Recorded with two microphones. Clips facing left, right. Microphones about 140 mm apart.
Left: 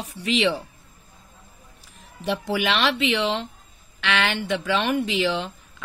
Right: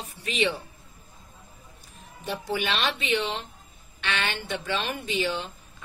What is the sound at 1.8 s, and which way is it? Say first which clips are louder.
Speech: left 8 dB; 90° left.